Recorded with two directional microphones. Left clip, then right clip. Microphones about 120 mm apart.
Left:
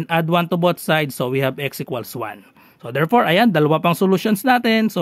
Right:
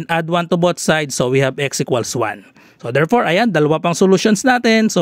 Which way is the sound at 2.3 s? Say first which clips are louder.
Right 6 dB; 40° right (ahead or behind).